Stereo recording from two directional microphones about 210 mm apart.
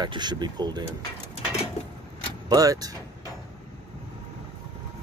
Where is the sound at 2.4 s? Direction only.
15° right (ahead or behind).